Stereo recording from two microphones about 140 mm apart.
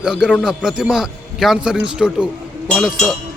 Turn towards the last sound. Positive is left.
turn(degrees=0)  # may be behind; listen again after turning